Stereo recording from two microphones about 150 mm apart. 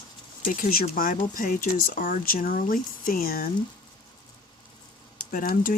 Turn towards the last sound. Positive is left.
turn(degrees=70)  # may be behind; listen again after turning